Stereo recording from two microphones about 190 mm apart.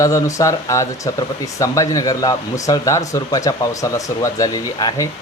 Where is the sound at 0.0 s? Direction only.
15° left (ahead or behind).